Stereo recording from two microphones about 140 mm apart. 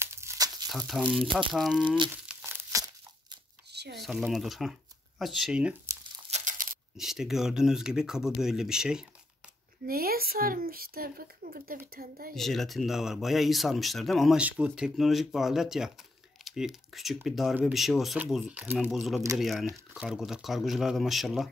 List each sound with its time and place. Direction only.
0.0 s crumpling: 20° right (ahead or behind)
0.7 s speech: centre (ahead or behind)
2.4 s tearing: 20° right (ahead or behind)
4.0 s speech: centre (ahead or behind)
6.3 s a sound: 70° right (ahead or behind)
7.0 s speech: centre (ahead or behind)
9.8 s speech: 90° right
12.4 s speech: centre (ahead or behind)